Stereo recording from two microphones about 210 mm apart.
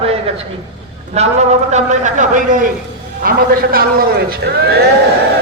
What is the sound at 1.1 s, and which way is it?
A man's voice, 30° right (ahead or behind).